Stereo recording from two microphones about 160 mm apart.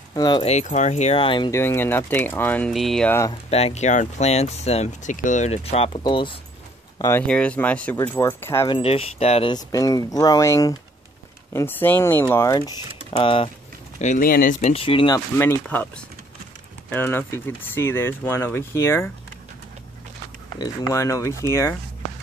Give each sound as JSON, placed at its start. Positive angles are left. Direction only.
{"t": 0.1, "sound": "speech", "side_deg": 25}
{"t": 0.5, "sound": "speech", "side_deg": 50}
{"t": 1.5, "sound": "speech", "side_deg": 15}
{"t": 3.4, "sound": "speech", "side_deg": 40}
{"t": 7.0, "sound": "speech", "side_deg": 15}
{"t": 8.6, "sound": "speech", "side_deg": 35}
{"t": 9.5, "sound": "speech", "side_deg": 25}
{"t": 13.1, "sound": "speech", "side_deg": 35}
{"t": 13.9, "sound": "speech", "side_deg": 50}
{"t": 14.7, "sound": "speech", "side_deg": 35}
{"t": 15.1, "sound": "speech", "side_deg": 15}
{"t": 16.9, "sound": "speech", "side_deg": 15}
{"t": 20.5, "sound": "speech", "side_deg": 25}